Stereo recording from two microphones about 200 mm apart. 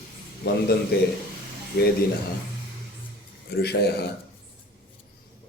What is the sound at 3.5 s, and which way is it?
Speech, 50° left (ahead or behind).